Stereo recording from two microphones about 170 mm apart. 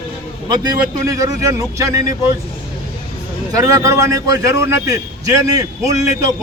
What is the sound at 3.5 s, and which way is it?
A man's voice, 20° right (ahead or behind).